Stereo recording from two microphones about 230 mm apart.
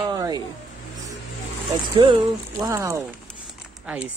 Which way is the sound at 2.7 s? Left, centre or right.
Centre.